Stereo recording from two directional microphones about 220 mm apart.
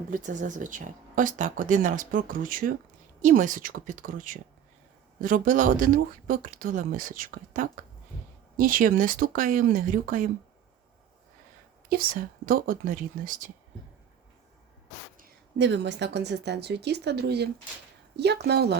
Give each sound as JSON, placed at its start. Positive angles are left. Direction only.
{"t": 0.1, "sound": "speech", "side_deg": -35}
{"t": 11.9, "sound": "speech", "side_deg": -40}
{"t": 15.2, "sound": "a woman's voice", "side_deg": -55}